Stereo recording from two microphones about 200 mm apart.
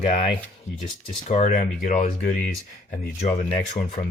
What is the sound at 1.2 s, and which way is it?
Speech, 35° left (ahead or behind).